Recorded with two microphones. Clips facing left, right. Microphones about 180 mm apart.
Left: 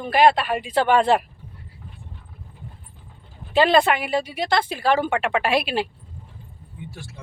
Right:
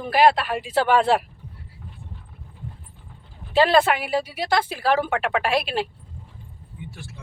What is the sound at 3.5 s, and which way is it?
A woman's voice, centre (ahead or behind).